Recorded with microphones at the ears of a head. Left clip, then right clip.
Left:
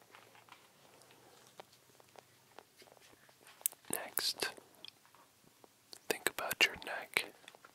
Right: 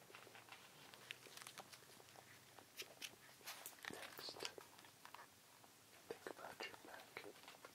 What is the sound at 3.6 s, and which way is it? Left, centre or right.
Whispering, left.